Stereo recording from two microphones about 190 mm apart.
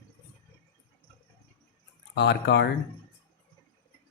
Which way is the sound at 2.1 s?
60° left (ahead or behind).